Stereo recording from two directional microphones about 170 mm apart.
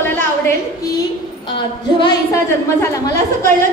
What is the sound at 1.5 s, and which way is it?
A woman's voice, 25° left (ahead or behind).